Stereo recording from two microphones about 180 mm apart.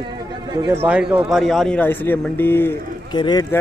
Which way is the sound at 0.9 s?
5° right (ahead or behind).